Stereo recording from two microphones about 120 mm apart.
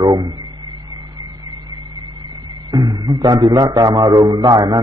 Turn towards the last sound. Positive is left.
turn(degrees=-35)  # may be behind; listen again after turning